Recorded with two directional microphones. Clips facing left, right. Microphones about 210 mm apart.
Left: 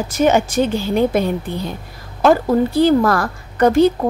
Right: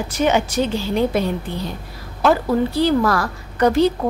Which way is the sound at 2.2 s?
50° left (ahead or behind).